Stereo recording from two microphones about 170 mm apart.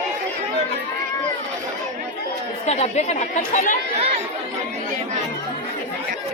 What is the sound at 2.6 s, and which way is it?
Speech, 40° left (ahead or behind).